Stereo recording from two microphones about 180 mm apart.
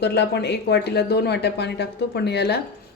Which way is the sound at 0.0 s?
65° left (ahead or behind).